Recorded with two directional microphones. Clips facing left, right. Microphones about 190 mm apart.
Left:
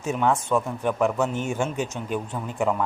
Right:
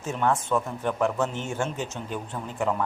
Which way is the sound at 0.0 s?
15° left (ahead or behind).